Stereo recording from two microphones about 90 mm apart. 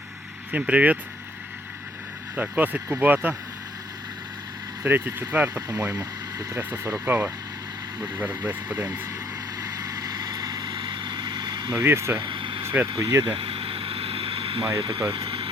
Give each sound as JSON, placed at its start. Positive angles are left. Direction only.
{"t": 0.5, "sound": "speech", "side_deg": -15}
{"t": 2.3, "sound": "speech", "side_deg": -15}
{"t": 4.8, "sound": "speech", "side_deg": -20}
{"t": 5.8, "sound": "speech", "side_deg": -35}
{"t": 7.1, "sound": "speech", "side_deg": -20}
{"t": 9.6, "sound": "vehicle", "side_deg": -40}
{"t": 11.8, "sound": "speech", "side_deg": -30}
{"t": 12.2, "sound": "vehicle", "side_deg": -70}
{"t": 13.0, "sound": "speech", "side_deg": -35}
{"t": 13.2, "sound": "vehicle", "side_deg": -90}